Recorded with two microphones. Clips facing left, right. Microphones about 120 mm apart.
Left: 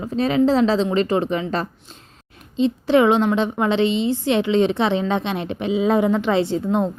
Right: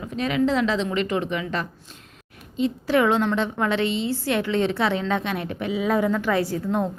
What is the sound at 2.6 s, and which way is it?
A woman's voice, 25° left (ahead or behind).